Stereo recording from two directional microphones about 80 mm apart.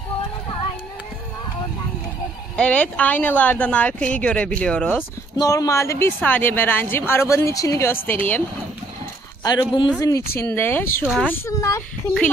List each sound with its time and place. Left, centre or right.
2.5 s speech: centre
5.4 s speech: left
7.8 s speech: left
9.4 s speech: left
9.9 s speech: left
10.5 s speech: left
11.4 s speech: left